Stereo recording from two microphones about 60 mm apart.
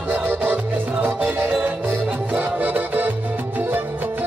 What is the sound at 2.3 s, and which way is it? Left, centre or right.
Music, right.